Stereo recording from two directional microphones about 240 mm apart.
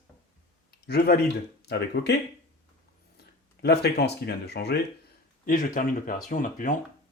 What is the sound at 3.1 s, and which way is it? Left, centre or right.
Speech, left.